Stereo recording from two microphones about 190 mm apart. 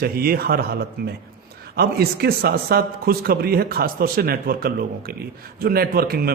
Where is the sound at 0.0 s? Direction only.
50° right (ahead or behind).